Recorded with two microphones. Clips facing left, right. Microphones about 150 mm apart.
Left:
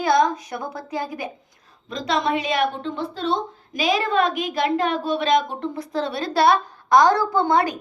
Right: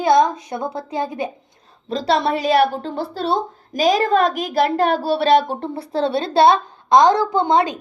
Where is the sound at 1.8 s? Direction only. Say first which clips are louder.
Right 4 dB; 35° right (ahead or behind).